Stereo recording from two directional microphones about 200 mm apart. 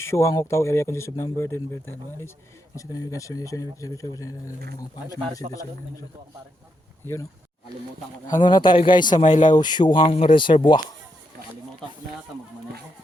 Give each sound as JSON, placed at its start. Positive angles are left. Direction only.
{"t": 0.0, "sound": "speech", "side_deg": 15}
{"t": 7.0, "sound": "speech", "side_deg": 10}
{"t": 8.3, "sound": "speech", "side_deg": 20}